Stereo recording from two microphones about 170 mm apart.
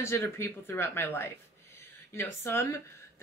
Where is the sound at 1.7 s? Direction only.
15° left (ahead or behind).